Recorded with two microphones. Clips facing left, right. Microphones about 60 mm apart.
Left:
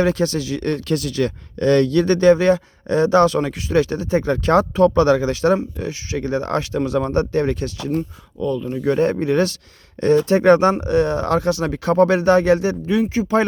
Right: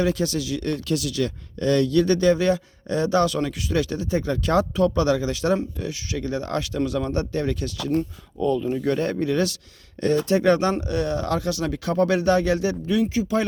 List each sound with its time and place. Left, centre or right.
0.0 s speech: left
7.9 s speech: centre
9.0 s speech: left